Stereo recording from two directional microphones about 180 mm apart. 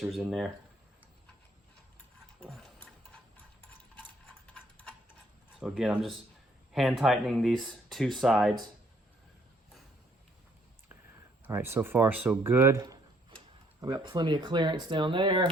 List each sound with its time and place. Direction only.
0.0 s speech: centre (ahead or behind)
2.4 s tick-tock: centre (ahead or behind)
4.3 s a sound: 5° left (ahead or behind)
5.5 s speech: 5° right (ahead or behind)
11.4 s speech: 10° right (ahead or behind); by 15.4 s 25° right (ahead or behind)